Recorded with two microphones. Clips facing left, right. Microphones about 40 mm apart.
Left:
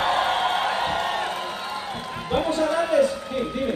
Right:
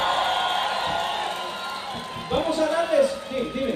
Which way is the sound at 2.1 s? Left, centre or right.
Left.